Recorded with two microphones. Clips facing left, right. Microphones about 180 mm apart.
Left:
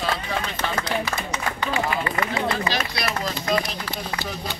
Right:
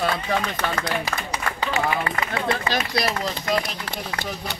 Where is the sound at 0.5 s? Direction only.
60° right (ahead or behind).